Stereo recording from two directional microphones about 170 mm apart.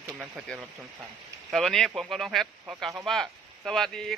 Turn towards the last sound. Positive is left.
turn(degrees=0)  # may be behind; listen again after turning